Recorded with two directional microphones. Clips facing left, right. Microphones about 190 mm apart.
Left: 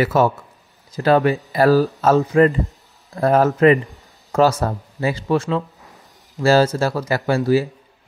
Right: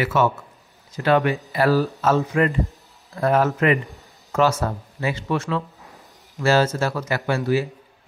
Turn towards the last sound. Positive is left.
turn(degrees=35)  # may be behind; listen again after turning